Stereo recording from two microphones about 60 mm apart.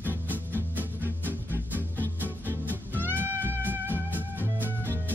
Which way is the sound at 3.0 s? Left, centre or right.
Right.